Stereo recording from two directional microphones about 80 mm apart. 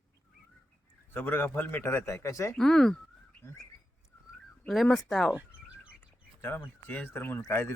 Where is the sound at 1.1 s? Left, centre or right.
Left.